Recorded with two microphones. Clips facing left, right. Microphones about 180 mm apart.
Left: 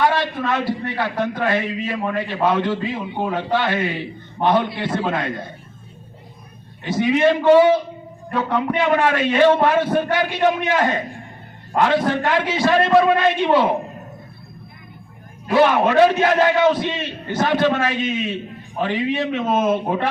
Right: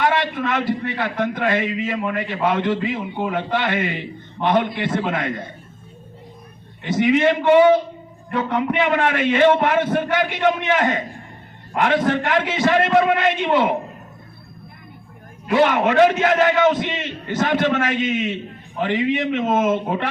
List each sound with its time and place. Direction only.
0.0 s a man's voice: 20° right (ahead or behind)
6.8 s a man's voice: 20° right (ahead or behind)
15.5 s a man's voice: 20° right (ahead or behind)